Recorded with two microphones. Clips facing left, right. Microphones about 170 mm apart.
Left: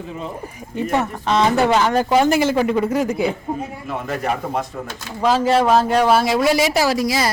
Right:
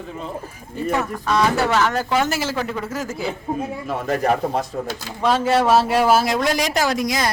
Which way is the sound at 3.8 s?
35° right (ahead or behind).